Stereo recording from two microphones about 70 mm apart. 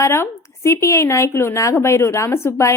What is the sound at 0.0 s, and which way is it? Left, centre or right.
A woman's voice, left.